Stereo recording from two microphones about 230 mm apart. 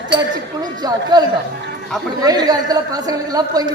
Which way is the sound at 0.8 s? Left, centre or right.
Centre.